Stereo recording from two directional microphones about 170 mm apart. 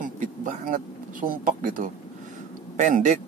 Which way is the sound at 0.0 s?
50° right (ahead or behind).